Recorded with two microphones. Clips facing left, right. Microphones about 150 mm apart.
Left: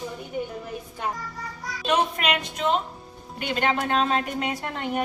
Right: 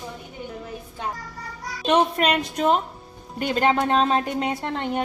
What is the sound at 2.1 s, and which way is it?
Speech, 40° right (ahead or behind).